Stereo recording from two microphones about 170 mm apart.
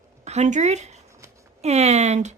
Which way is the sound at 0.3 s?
40° right (ahead or behind).